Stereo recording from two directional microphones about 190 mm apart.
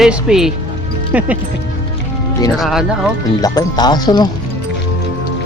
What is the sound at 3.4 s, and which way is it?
Speech, 20° left (ahead or behind).